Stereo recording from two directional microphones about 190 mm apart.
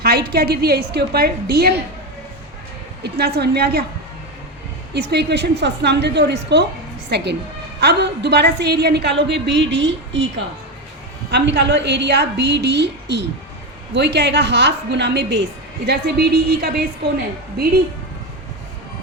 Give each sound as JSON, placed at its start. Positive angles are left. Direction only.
{"t": 0.0, "sound": "a woman's voice", "side_deg": -55}
{"t": 3.0, "sound": "a woman's voice", "side_deg": -60}
{"t": 4.9, "sound": "a woman's voice", "side_deg": -60}